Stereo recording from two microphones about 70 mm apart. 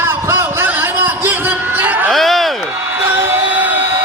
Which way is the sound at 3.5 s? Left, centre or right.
Right.